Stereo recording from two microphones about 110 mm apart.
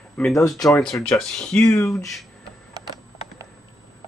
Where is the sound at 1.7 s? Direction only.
25° left (ahead or behind).